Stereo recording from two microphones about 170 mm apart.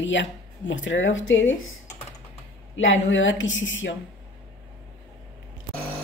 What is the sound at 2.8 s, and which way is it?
Speech, 90° left.